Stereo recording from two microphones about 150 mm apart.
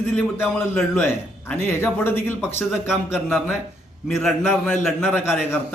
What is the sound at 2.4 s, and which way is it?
Speech, 5° right (ahead or behind).